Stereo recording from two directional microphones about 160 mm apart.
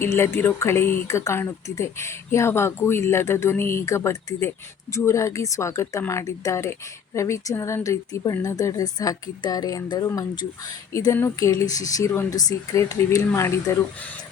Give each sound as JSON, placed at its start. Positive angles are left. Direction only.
{"t": 0.0, "sound": "speech", "side_deg": 15}